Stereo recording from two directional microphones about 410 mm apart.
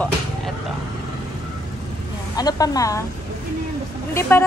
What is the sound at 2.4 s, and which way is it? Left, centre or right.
Speech, centre.